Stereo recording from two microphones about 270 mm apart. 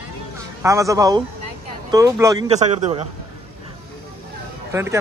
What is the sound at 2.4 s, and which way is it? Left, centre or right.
Speech, right.